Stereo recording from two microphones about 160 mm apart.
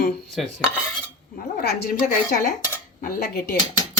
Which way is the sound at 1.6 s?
90° left.